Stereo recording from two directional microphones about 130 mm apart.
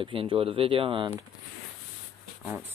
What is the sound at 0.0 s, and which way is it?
Speech, 40° right (ahead or behind).